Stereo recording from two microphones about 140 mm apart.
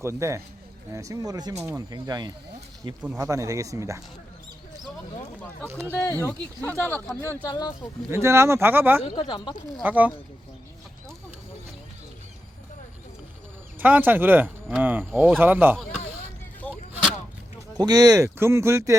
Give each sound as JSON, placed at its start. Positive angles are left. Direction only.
{"t": 0.0, "sound": "speech", "side_deg": -20}
{"t": 5.6, "sound": "speech", "side_deg": -15}
{"t": 6.0, "sound": "speech", "side_deg": 20}
{"t": 8.1, "sound": "speech", "side_deg": -20}
{"t": 9.0, "sound": "speech", "side_deg": 35}
{"t": 9.8, "sound": "speech", "side_deg": -10}
{"t": 13.7, "sound": "speech", "side_deg": -10}
{"t": 16.6, "sound": "artillery fire", "side_deg": 10}
{"t": 17.7, "sound": "speech", "side_deg": -30}